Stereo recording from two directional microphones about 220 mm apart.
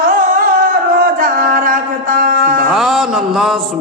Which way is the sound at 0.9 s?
40° right (ahead or behind).